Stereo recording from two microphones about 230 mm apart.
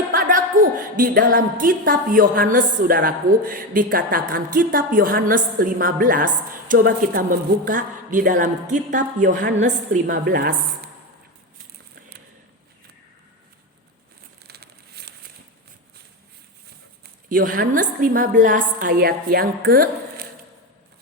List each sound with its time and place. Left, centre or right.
0.1 s speech: right
14.4 s crumpling: right
17.3 s speech: right